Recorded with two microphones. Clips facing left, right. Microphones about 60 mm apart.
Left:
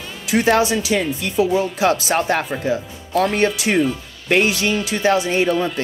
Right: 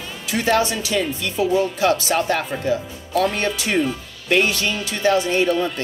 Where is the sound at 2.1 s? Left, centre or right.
Left.